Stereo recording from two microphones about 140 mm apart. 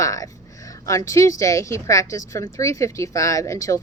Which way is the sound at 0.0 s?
25° left (ahead or behind).